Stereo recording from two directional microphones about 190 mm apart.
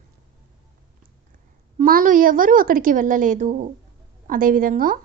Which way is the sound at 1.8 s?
45° right (ahead or behind).